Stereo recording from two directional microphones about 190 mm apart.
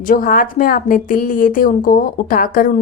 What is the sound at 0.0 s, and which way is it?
A woman's voice, 45° left (ahead or behind).